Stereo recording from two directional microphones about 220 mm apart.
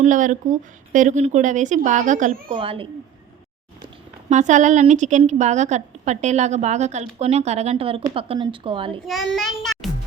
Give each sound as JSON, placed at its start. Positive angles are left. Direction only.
{"t": 0.0, "sound": "a woman's voice", "side_deg": -35}
{"t": 2.6, "sound": "speech", "side_deg": -25}
{"t": 4.3, "sound": "a woman's voice", "side_deg": -35}
{"t": 9.0, "sound": "child singing", "side_deg": 0}